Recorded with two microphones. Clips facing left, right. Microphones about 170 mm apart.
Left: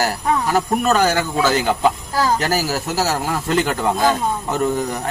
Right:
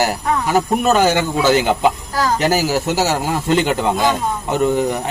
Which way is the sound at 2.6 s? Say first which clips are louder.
Right 4 dB; 15° right (ahead or behind).